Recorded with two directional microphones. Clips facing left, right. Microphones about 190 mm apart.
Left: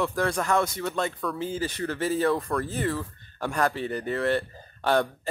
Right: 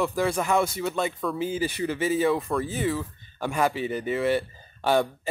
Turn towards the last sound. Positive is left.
turn(degrees=-5)  # may be behind; listen again after turning